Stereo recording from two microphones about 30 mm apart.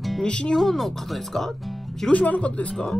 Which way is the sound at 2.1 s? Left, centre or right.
Left.